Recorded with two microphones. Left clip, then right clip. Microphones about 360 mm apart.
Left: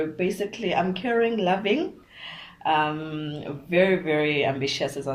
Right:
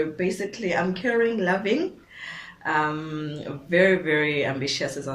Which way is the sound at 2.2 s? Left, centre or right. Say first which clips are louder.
Right 2 dB; centre.